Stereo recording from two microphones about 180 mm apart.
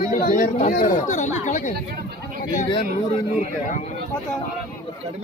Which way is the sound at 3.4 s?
40° left (ahead or behind).